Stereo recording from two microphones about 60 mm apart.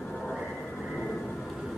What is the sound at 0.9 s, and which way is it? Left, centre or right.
Train, centre.